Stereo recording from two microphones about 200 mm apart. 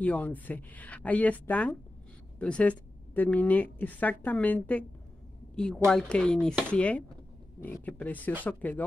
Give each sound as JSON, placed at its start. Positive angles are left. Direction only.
{"t": 0.0, "sound": "a woman's voice", "side_deg": 5}